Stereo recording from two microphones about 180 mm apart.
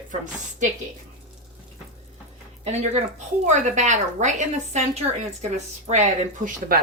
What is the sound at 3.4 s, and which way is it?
Speech, 40° right (ahead or behind).